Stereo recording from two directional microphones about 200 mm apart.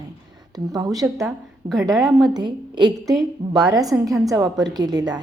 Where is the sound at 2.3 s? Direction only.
20° right (ahead or behind).